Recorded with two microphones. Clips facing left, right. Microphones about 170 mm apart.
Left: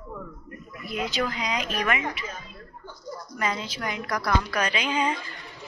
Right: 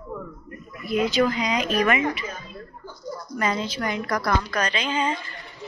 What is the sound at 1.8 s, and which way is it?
Speech, centre (ahead or behind).